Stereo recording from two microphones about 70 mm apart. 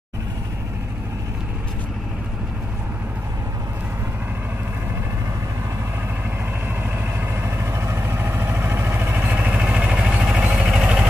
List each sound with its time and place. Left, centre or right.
7.4 s vehicle: right; by 11.1 s centre